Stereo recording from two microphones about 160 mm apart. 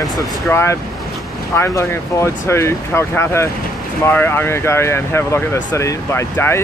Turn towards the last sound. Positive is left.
turn(degrees=15)  # may be behind; listen again after turning